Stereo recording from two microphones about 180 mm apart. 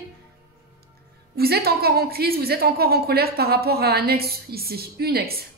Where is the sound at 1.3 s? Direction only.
60° right (ahead or behind).